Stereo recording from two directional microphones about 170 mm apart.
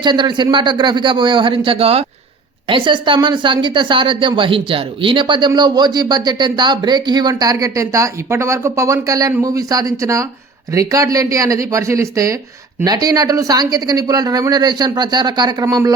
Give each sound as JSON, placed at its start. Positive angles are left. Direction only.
{"t": 0.0, "sound": "speech", "side_deg": -25}